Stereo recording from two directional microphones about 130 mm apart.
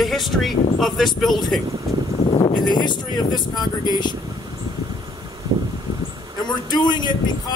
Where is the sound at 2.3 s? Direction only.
40° left (ahead or behind).